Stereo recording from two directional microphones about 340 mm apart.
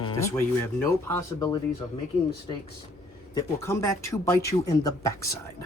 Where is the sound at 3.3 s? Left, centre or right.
Centre.